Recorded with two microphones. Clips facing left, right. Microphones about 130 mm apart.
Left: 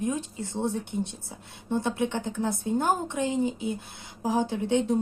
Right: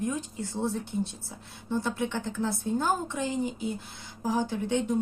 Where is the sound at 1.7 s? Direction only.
20° left (ahead or behind).